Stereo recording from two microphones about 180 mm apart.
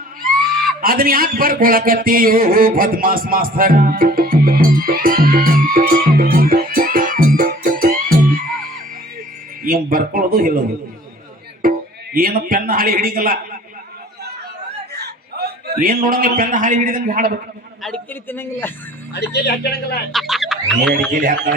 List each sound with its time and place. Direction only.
0.8 s a sound: 55° right (ahead or behind)
9.6 s a man's voice: 50° right (ahead or behind)
11.6 s music: 55° right (ahead or behind)
12.1 s a man's voice: 50° right (ahead or behind)
14.9 s a man's voice: 65° right (ahead or behind)
17.8 s a man's voice: 10° left (ahead or behind)
19.1 s a woman's voice: 65° left (ahead or behind)
20.1 s chicken: centre (ahead or behind)
21.1 s a man's voice: 50° right (ahead or behind)